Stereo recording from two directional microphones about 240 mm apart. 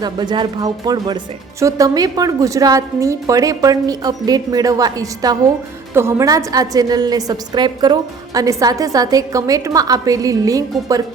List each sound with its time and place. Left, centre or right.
0.0 s speech: centre